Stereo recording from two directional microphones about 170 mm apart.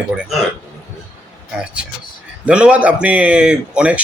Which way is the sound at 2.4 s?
5° right (ahead or behind).